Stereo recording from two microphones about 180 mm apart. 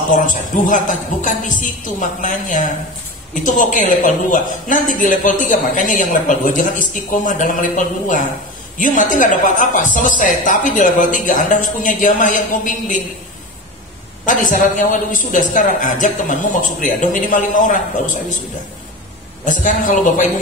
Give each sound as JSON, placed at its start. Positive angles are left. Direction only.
{"t": 0.1, "sound": "a man's voice", "side_deg": 45}
{"t": 14.2, "sound": "a man's voice", "side_deg": 45}
{"t": 19.4, "sound": "a man's voice", "side_deg": 45}